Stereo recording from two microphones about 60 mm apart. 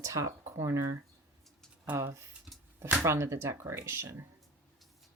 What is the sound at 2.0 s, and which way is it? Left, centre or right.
Speech, right.